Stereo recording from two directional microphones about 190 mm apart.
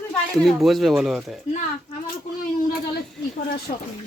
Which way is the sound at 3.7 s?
40° left (ahead or behind).